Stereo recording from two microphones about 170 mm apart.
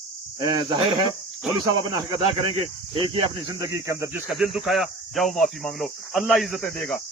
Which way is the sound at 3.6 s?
20° right (ahead or behind).